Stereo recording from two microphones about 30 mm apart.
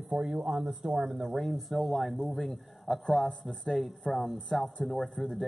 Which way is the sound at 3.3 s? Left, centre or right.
Left.